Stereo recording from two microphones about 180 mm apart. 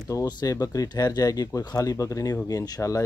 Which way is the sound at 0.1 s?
20° left (ahead or behind).